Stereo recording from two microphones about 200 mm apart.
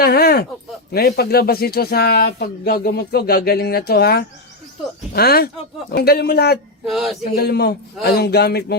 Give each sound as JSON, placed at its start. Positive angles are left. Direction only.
{"t": 0.0, "sound": "speech", "side_deg": 50}
{"t": 6.8, "sound": "a sound", "side_deg": 0}
{"t": 7.3, "sound": "a man's voice", "side_deg": 50}